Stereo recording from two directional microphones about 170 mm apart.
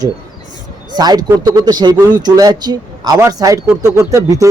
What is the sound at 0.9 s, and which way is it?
A man's voice, 25° right (ahead or behind).